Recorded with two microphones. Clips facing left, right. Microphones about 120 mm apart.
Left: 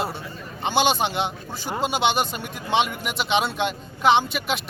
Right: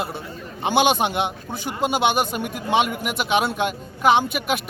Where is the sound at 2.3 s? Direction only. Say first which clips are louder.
Right 5 dB; 50° right (ahead or behind).